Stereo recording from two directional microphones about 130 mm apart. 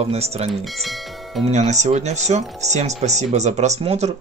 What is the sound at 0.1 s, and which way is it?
Speech, 50° right (ahead or behind).